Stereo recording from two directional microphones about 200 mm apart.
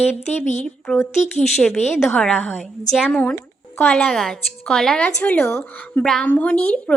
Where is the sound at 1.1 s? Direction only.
35° left (ahead or behind).